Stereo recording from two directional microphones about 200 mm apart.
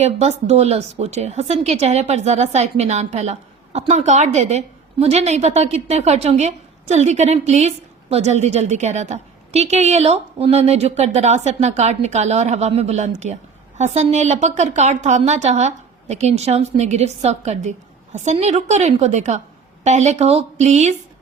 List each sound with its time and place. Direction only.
0.0 s a woman's voice: 35° right (ahead or behind)